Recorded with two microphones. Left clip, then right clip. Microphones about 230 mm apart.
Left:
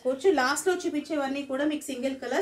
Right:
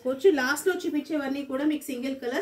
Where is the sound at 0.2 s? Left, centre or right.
Left.